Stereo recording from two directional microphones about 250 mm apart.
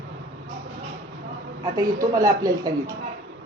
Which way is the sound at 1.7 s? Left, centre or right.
Centre.